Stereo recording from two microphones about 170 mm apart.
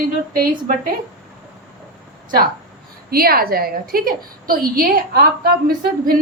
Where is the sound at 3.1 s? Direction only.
60° right (ahead or behind).